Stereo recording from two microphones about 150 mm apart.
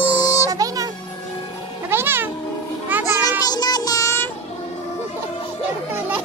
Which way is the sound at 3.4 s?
25° left (ahead or behind).